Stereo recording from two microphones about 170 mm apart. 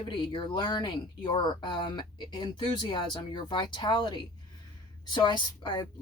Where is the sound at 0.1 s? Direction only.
30° left (ahead or behind).